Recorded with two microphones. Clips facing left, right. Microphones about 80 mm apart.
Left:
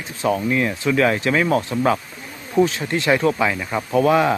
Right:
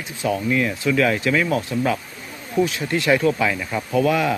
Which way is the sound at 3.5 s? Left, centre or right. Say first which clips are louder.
Left 1 dB; centre.